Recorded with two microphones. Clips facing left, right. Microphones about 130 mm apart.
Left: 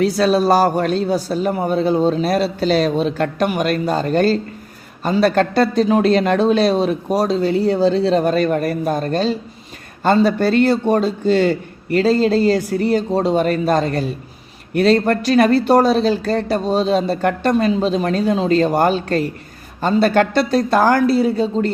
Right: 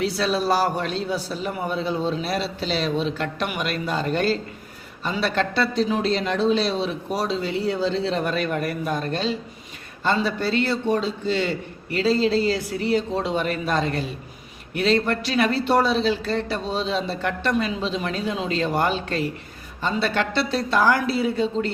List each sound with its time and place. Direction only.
0.0 s speech: 45° left (ahead or behind)